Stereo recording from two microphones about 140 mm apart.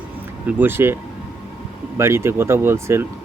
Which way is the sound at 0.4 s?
15° right (ahead or behind).